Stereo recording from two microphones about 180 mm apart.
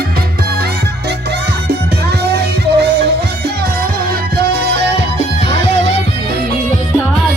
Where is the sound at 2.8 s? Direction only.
65° right (ahead or behind).